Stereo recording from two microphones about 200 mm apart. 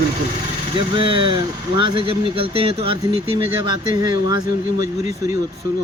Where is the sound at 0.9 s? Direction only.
25° right (ahead or behind).